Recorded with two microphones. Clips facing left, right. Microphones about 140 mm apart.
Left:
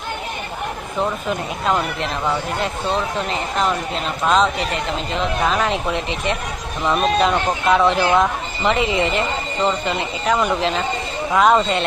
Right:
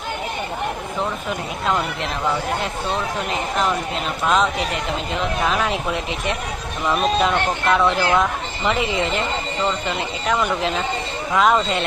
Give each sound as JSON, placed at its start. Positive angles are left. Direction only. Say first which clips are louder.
{"t": 1.6, "sound": "speech", "louder": "left 2 dB", "side_deg": 0}